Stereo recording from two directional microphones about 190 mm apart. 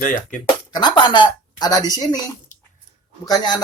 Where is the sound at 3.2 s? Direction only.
20° left (ahead or behind).